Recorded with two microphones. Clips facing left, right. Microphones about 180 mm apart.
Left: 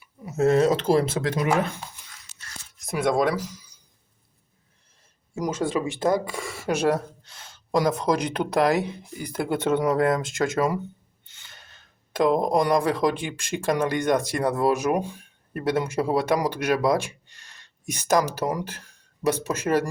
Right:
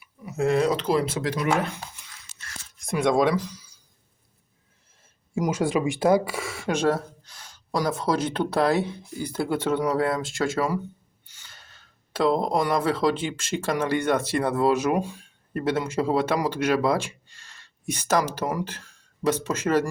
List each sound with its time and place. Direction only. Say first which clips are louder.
0.3 s speech: left 3 dB; 40° left (ahead or behind)
1.1 s speech: left 2 dB; 25° left (ahead or behind)
2.8 s speech: right 1 dB; 5° left (ahead or behind)
5.3 s speech: right 2 dB; 10° right (ahead or behind); by 10.8 s 20° left (ahead or behind)
12.2 s speech: left 2 dB; 15° left (ahead or behind)